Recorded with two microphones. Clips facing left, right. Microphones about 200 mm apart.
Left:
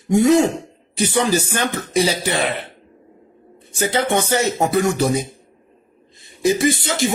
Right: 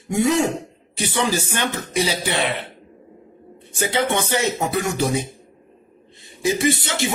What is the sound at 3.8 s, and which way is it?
Speech, 40° left (ahead or behind).